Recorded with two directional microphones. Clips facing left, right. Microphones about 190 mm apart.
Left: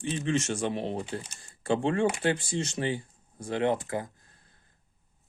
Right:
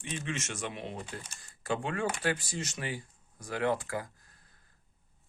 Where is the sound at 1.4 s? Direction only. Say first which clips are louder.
Left 6 dB; 30° left (ahead or behind).